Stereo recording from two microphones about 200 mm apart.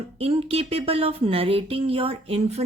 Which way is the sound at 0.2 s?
30° right (ahead or behind).